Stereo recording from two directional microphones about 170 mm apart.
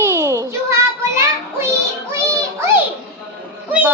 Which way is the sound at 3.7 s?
10° right (ahead or behind).